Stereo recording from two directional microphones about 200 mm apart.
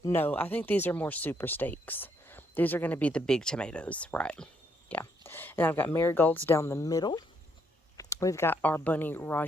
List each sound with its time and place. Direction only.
0.0 s speech: 10° left (ahead or behind)